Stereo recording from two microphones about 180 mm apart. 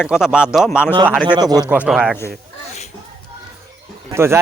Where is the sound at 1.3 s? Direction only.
20° right (ahead or behind).